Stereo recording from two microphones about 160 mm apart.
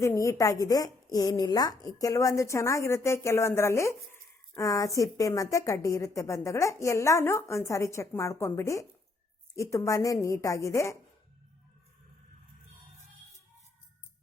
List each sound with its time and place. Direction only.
0.0 s a woman's voice: 20° left (ahead or behind)